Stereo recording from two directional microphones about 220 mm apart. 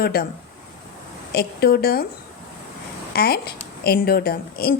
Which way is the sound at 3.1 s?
45° left (ahead or behind).